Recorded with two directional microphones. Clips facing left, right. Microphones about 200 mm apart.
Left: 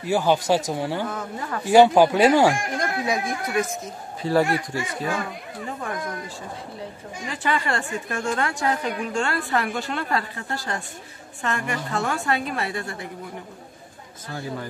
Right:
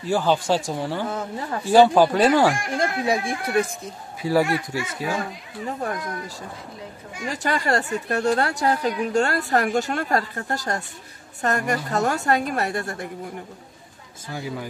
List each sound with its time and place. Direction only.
0.0 s speech: 10° left (ahead or behind)
1.0 s speech: 30° right (ahead or behind)
1.7 s speech: 15° left (ahead or behind)
2.8 s speech: 30° right (ahead or behind)
4.2 s speech: 5° right (ahead or behind)
5.8 s a woman's voice: 40° right (ahead or behind)
14.3 s a man's voice: 10° right (ahead or behind)